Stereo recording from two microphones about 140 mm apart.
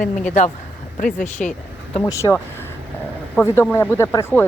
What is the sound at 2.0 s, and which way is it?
Speech, 20° left (ahead or behind).